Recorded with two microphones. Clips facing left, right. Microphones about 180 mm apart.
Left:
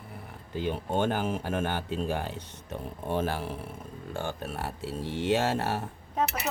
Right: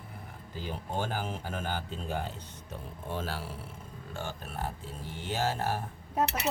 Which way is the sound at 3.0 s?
60° left (ahead or behind).